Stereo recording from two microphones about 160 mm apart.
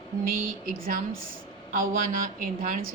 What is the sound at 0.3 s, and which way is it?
A woman's voice, 60° right (ahead or behind).